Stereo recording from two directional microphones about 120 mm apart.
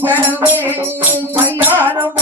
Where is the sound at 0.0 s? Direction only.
15° right (ahead or behind).